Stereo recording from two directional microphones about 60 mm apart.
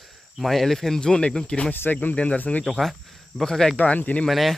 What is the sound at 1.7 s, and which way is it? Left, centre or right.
Speech, left.